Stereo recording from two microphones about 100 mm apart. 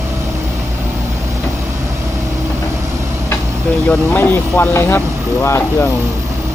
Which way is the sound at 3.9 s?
15° left (ahead or behind).